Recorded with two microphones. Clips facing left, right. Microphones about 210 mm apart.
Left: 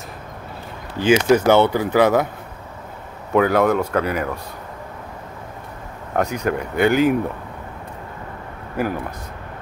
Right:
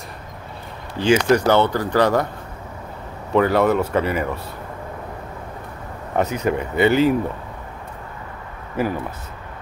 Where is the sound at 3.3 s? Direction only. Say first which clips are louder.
Even; centre (ahead or behind).